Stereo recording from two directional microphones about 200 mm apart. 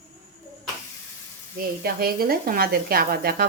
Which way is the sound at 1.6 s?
50° right (ahead or behind).